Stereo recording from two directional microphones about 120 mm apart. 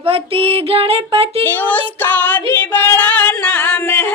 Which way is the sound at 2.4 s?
15° left (ahead or behind).